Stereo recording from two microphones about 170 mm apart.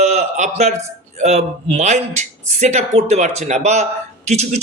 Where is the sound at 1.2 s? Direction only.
40° right (ahead or behind).